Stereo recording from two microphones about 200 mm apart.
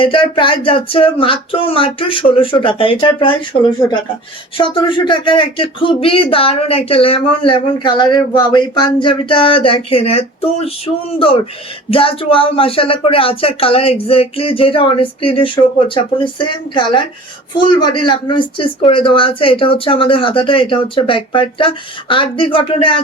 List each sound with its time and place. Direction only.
0.0 s speech: 25° left (ahead or behind)
4.5 s speech: 25° left (ahead or behind)
11.9 s speech: 25° left (ahead or behind)